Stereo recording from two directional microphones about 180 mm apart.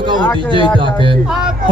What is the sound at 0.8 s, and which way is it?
Speech, 25° right (ahead or behind).